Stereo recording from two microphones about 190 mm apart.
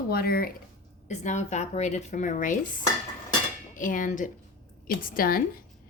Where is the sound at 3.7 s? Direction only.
45° left (ahead or behind).